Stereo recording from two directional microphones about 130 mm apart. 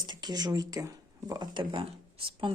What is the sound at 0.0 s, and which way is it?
Speech, 35° right (ahead or behind).